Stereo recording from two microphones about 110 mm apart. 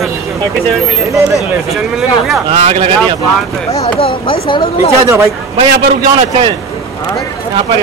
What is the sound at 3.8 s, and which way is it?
Speech, 60° left (ahead or behind).